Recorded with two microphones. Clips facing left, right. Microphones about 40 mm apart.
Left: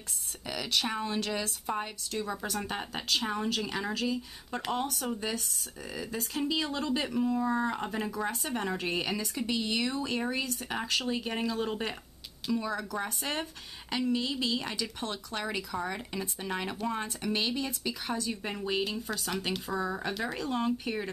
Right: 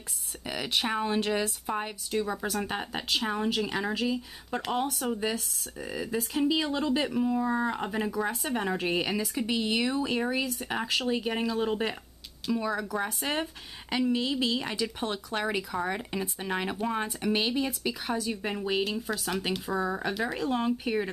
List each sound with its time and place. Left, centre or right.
0.5 s speech: right